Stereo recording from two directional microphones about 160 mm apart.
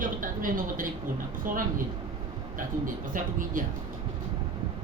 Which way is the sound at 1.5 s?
60° right (ahead or behind).